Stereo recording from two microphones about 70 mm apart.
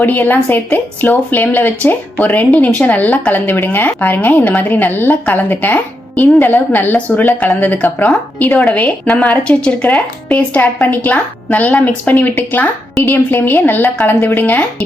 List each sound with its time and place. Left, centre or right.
0.0 s speech: left